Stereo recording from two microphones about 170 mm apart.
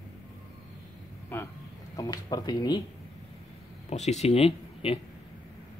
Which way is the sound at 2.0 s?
20° left (ahead or behind).